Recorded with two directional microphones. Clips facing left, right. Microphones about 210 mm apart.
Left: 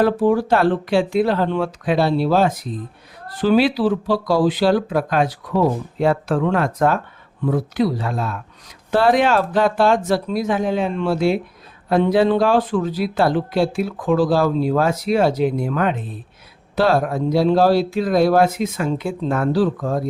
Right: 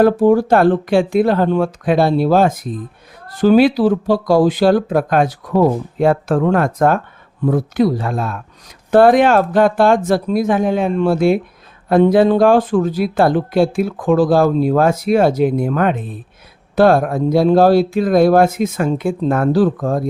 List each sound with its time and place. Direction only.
0.0 s speech: 45° right (ahead or behind)